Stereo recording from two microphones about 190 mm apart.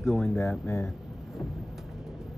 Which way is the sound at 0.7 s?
15° left (ahead or behind).